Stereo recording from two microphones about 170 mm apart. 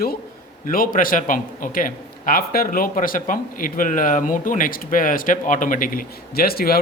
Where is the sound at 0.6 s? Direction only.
55° left (ahead or behind).